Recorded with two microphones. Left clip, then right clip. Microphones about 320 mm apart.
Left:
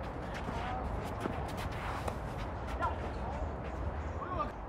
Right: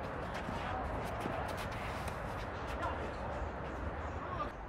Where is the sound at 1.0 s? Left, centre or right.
Centre.